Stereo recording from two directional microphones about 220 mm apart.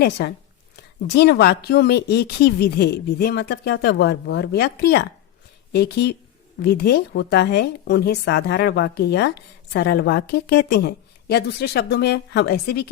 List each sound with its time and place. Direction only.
0.0 s a woman's voice: 50° left (ahead or behind)